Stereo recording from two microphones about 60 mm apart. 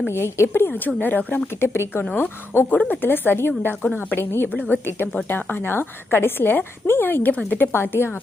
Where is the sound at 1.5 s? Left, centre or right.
Left.